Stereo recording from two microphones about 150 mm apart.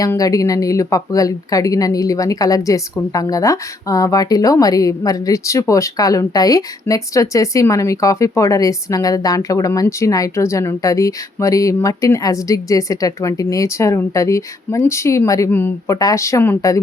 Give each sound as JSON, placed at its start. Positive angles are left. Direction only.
{"t": 0.0, "sound": "speech", "side_deg": 20}